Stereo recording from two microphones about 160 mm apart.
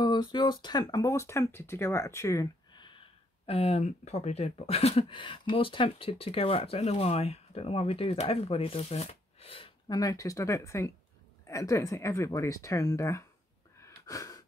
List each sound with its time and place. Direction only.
0.0 s speech: 25° left (ahead or behind)
13.8 s wheeze: 20° left (ahead or behind)